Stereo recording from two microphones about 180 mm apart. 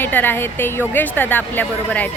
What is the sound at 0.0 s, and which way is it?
A woman's voice, 10° left (ahead or behind).